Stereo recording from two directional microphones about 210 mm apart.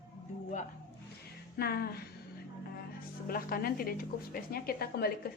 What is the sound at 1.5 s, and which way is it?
Speech, 50° left (ahead or behind).